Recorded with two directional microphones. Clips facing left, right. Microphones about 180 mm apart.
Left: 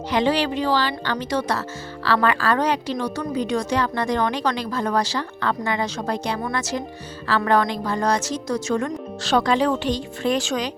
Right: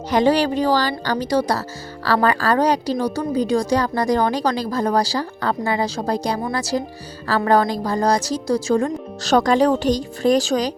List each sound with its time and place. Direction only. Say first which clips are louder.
0.1 s a woman's voice: right 4 dB; 40° right (ahead or behind)